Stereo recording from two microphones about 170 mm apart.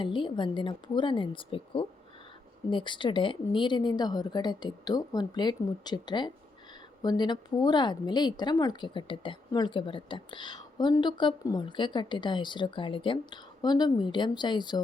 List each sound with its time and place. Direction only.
0.0 s speech: 30° left (ahead or behind)